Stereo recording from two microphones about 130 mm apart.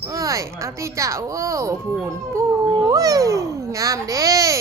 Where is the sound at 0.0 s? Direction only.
25° right (ahead or behind).